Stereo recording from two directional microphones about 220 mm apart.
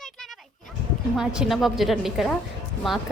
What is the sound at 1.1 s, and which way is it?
Speech, centre (ahead or behind).